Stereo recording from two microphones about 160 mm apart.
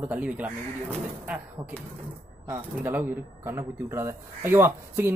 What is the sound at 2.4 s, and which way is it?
Speech, 10° right (ahead or behind).